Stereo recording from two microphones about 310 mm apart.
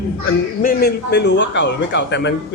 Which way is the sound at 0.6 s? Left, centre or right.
Left.